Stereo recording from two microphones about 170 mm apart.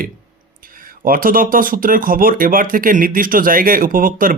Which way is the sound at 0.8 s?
55° right (ahead or behind).